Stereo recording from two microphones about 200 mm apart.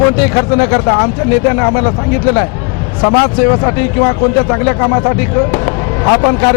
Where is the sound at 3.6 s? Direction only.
25° left (ahead or behind).